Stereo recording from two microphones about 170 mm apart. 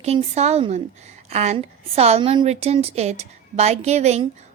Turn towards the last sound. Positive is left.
turn(degrees=-40)  # may be behind; listen again after turning